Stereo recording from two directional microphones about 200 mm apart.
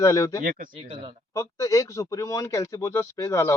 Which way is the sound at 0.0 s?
15° left (ahead or behind).